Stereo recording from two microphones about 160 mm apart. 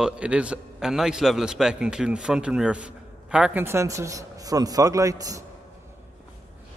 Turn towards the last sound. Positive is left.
turn(degrees=-20)  # may be behind; listen again after turning